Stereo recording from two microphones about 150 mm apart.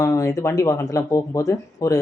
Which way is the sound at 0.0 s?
20° left (ahead or behind).